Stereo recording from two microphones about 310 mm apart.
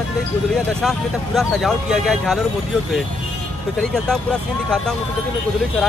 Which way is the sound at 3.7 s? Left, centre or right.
Centre.